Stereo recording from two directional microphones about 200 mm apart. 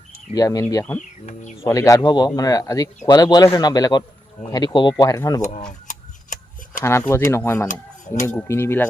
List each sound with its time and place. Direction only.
0.3 s speech: 20° left (ahead or behind)
0.9 s speech: 35° left (ahead or behind)
1.6 s speech: 15° left (ahead or behind)
5.4 s speech: 40° left (ahead or behind)
5.9 s tick-tock: 40° left (ahead or behind)
7.3 s speech: 15° left (ahead or behind)
7.7 s speech: 40° left (ahead or behind)
8.3 s speech: 10° left (ahead or behind)